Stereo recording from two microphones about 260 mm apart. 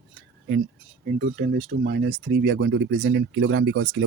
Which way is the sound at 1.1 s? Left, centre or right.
Right.